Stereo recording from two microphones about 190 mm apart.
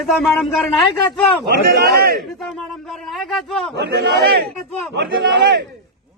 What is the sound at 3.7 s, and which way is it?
Speech, 60° right (ahead or behind).